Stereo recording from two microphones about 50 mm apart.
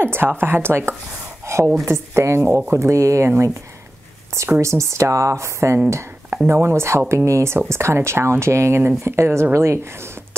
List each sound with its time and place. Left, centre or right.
0.0 s speech: right
1.4 s a sound: right
1.9 s speech: right
2.8 s speech: right
4.6 s speech: right
6.4 s speech: right